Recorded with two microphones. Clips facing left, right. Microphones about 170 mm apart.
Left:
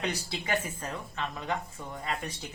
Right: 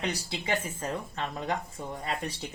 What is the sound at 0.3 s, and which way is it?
Speech, 25° right (ahead or behind).